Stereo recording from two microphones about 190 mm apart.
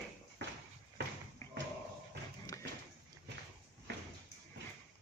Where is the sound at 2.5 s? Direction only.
15° left (ahead or behind).